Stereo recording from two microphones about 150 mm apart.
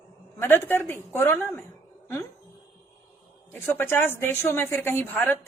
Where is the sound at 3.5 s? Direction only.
15° left (ahead or behind).